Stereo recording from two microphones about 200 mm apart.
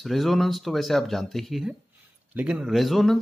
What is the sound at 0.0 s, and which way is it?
Speech, centre (ahead or behind).